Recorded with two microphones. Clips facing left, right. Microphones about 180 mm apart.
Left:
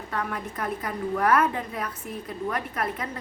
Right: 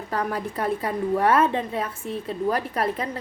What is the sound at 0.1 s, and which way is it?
A woman's voice, 35° right (ahead or behind).